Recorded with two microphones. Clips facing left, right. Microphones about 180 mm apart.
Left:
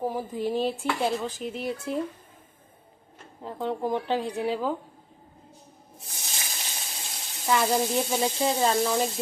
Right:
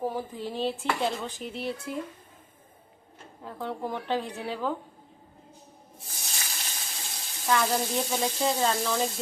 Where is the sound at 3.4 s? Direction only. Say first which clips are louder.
Left 5 dB; 25° left (ahead or behind).